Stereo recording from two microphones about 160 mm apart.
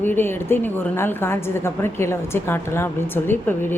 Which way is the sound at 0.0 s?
15° left (ahead or behind).